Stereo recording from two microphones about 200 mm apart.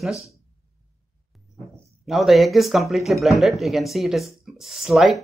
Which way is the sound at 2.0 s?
Centre (ahead or behind).